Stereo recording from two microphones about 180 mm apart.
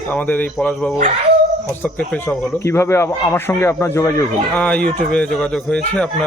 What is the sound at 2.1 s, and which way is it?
Speech, 5° left (ahead or behind).